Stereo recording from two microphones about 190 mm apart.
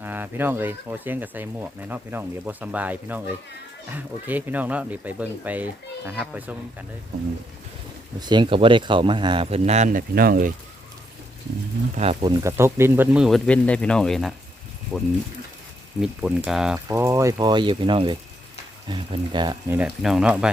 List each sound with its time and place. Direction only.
0.0 s speech: 10° right (ahead or behind)
8.2 s speech: 25° right (ahead or behind); by 10.5 s 50° right (ahead or behind)
11.9 s speech: 30° right (ahead or behind)
12.4 s speech: 15° right (ahead or behind)
16.9 s speech: 15° right (ahead or behind)
19.7 s speech: 5° right (ahead or behind)